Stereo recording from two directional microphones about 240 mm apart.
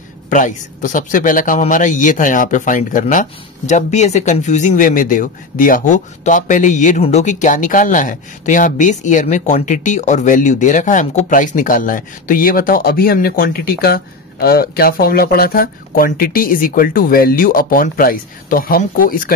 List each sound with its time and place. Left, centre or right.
0.3 s a man's voice: left